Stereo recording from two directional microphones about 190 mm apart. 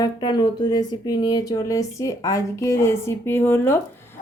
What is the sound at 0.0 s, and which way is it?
Speech, 25° left (ahead or behind).